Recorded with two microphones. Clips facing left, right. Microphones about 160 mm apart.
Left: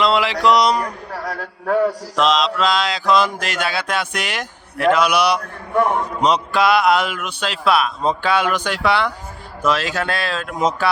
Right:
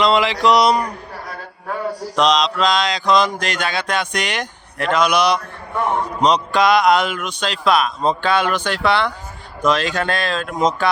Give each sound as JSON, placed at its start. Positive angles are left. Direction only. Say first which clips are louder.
{"t": 0.0, "sound": "mantra", "louder": "right 1 dB", "side_deg": 5}
{"t": 1.1, "sound": "a man's voice", "louder": "left 5 dB", "side_deg": 80}
{"t": 2.1, "sound": "mantra", "louder": "right 3 dB", "side_deg": 5}